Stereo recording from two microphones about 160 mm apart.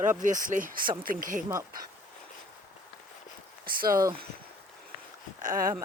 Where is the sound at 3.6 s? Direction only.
65° right (ahead or behind).